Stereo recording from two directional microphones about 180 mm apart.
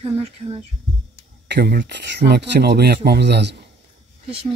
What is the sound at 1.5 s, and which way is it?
Speech, 65° right (ahead or behind).